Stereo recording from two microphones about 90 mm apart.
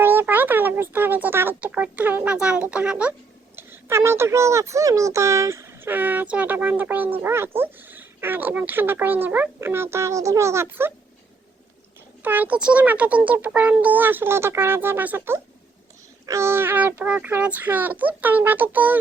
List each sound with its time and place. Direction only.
0.0 s a sound: 25° right (ahead or behind)
1.7 s speech: 15° right (ahead or behind)
3.5 s a child's voice: 25° right (ahead or behind)
12.2 s a child's voice: 20° right (ahead or behind)